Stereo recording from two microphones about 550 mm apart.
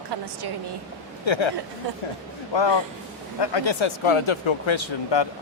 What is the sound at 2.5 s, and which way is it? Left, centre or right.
Speech, left.